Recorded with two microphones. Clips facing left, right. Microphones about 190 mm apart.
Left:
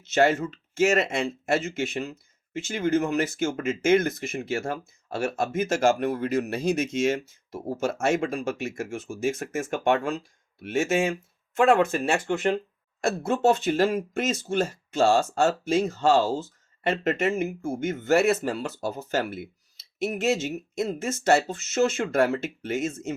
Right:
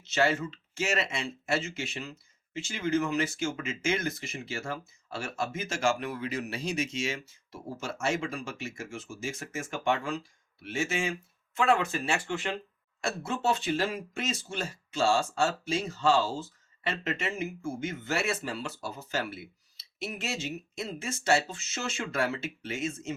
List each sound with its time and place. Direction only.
0.1 s speech: 50° left (ahead or behind)